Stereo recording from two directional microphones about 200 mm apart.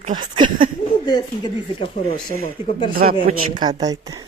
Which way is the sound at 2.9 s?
45° right (ahead or behind).